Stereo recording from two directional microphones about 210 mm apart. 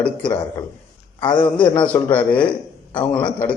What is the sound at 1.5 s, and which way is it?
Speech, 25° left (ahead or behind).